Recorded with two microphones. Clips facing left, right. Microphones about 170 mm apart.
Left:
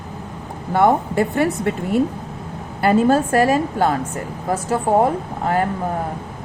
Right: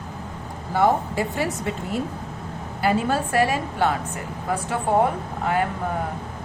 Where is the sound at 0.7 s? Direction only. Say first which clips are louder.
Left 4 dB; 55° left (ahead or behind).